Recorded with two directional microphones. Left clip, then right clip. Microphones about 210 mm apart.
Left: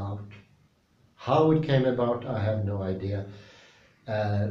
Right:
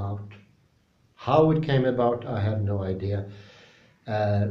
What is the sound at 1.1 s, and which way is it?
A man's voice, 40° right (ahead or behind).